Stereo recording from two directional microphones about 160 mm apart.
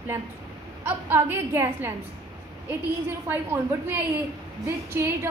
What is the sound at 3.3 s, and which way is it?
A woman's voice, 10° right (ahead or behind).